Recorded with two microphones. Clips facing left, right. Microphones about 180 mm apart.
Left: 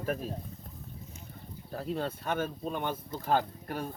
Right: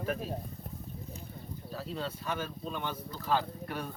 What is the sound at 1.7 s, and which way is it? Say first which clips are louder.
Speech: left 4 dB; 55° left (ahead or behind).